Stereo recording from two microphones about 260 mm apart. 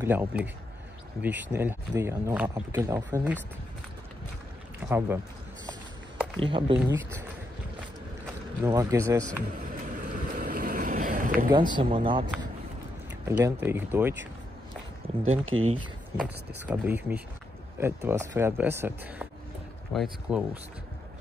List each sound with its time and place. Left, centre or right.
0.0 s speech: centre
4.7 s speech: centre
6.4 s speech: centre
8.6 s speech: centre
9.5 s boat: right
11.5 s speech: centre
15.4 s speech: right
16.2 s speech: centre